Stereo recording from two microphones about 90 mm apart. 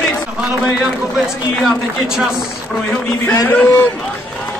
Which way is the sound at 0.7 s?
Centre (ahead or behind).